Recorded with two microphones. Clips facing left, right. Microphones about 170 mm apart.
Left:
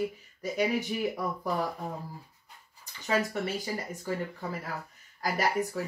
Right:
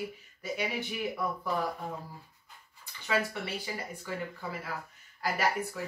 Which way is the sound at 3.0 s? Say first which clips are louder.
Left 3 dB; 40° left (ahead or behind).